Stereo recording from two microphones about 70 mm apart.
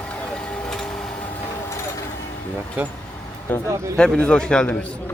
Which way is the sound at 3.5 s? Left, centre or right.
Left.